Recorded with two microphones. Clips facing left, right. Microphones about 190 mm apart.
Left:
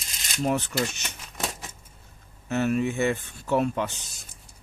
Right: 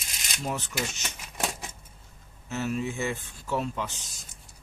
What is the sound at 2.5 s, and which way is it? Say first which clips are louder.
Speech: left 6 dB; 60° left (ahead or behind).